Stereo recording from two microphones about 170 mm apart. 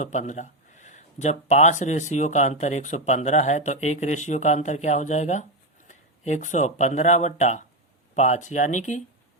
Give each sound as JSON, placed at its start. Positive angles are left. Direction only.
{"t": 0.0, "sound": "speech", "side_deg": 45}